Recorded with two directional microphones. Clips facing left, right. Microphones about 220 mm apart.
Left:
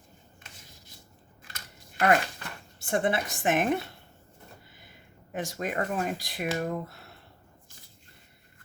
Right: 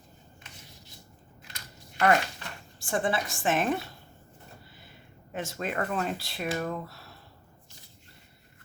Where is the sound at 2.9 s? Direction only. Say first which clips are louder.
Left 2 dB; 20° left (ahead or behind).